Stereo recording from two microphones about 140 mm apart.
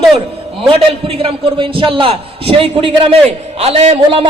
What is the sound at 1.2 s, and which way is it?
A man's voice, 40° right (ahead or behind).